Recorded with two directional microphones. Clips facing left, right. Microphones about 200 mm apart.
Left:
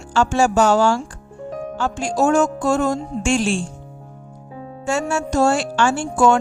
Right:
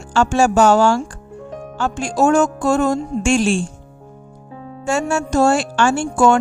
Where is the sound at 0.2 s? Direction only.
50° right (ahead or behind).